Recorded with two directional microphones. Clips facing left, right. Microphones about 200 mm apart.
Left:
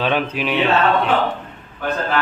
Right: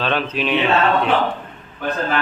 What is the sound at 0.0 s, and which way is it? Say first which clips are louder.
Speech: left 1 dB; 10° left (ahead or behind).